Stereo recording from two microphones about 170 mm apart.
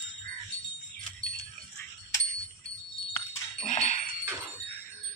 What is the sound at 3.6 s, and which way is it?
Dog, 45° left (ahead or behind).